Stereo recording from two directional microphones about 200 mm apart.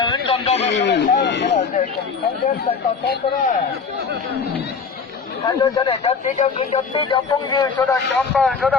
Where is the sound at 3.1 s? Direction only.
45° left (ahead or behind).